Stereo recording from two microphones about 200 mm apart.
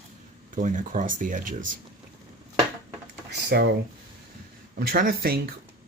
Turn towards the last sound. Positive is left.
turn(degrees=-50)  # may be behind; listen again after turning